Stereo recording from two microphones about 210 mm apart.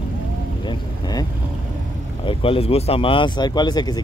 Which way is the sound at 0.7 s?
20° left (ahead or behind).